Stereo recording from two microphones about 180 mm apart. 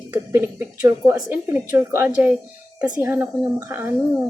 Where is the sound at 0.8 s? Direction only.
10° right (ahead or behind).